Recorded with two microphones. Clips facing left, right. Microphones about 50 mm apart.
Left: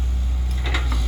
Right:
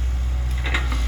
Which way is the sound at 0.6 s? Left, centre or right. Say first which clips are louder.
Right 2 dB; right.